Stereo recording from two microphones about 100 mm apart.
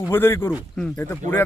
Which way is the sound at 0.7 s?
10° left (ahead or behind).